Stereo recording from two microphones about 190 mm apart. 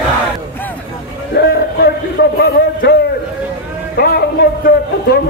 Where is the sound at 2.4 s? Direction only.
60° left (ahead or behind).